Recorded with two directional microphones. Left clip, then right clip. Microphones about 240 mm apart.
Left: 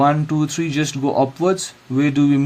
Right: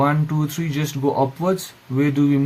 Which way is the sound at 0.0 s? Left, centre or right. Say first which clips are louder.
Left 4 dB; left.